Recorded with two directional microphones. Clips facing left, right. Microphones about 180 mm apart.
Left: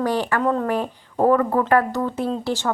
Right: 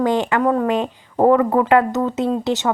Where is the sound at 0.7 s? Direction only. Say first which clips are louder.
Right 3 dB; 20° right (ahead or behind).